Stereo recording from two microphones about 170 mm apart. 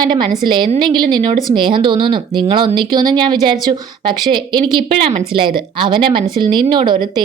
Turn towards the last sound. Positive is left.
turn(degrees=-25)  # may be behind; listen again after turning